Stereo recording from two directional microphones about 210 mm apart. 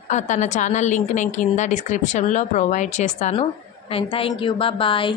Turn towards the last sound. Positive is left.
turn(degrees=25)  # may be behind; listen again after turning